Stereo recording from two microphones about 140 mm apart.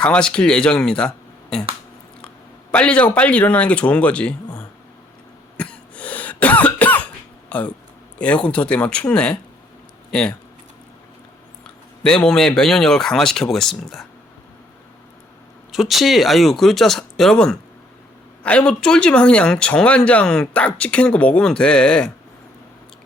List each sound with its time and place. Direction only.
0.0 s speech: 5° left (ahead or behind)
2.7 s speech: 10° left (ahead or behind)
5.5 s cough: 10° left (ahead or behind)
7.5 s speech: 10° left (ahead or behind)
11.6 s speech: 5° left (ahead or behind)
15.7 s speech: centre (ahead or behind)